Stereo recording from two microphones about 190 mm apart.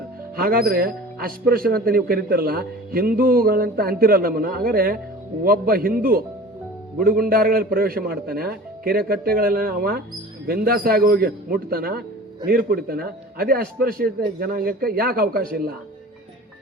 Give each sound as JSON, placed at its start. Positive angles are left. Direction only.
{"t": 0.3, "sound": "speech", "side_deg": -50}